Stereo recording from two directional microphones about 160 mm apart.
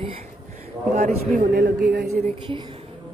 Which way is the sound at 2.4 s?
30° right (ahead or behind).